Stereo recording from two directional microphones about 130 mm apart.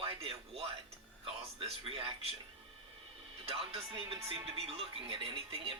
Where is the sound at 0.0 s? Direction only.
45° right (ahead or behind).